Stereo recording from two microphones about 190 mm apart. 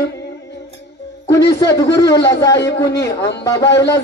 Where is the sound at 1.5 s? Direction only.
20° left (ahead or behind).